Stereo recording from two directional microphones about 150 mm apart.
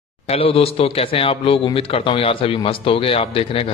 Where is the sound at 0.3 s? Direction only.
40° left (ahead or behind).